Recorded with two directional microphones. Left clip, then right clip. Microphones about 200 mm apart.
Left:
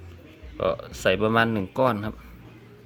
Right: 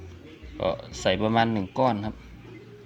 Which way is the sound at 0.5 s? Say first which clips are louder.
Left 2 dB; 20° left (ahead or behind).